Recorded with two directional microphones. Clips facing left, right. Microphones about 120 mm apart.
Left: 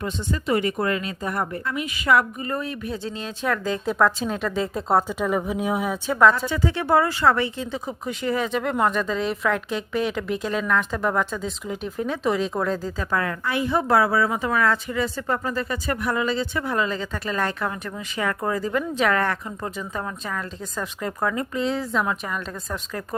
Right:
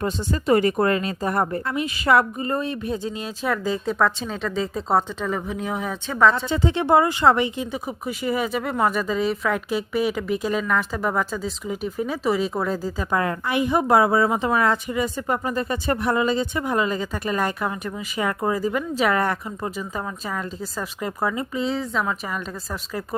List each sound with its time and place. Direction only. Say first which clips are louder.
0.0 s speech: right 3 dB; 40° right (ahead or behind)
3.0 s a woman's voice: right 1 dB; 10° right (ahead or behind)
6.5 s a woman's voice: right 2 dB; 25° right (ahead or behind); by 23.0 s 5° right (ahead or behind)